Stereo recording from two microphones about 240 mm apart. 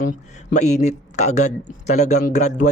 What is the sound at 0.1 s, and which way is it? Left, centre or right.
Speech, left.